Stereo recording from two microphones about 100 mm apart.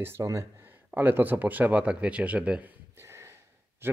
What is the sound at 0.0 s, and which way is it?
Speech, 30° right (ahead or behind).